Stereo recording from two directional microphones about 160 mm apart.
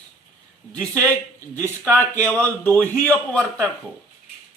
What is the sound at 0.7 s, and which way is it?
A man's voice, 10° left (ahead or behind).